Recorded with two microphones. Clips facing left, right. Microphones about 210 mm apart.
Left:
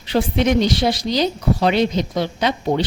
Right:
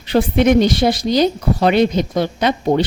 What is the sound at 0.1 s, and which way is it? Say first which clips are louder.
Speech: right 4 dB; 55° right (ahead or behind).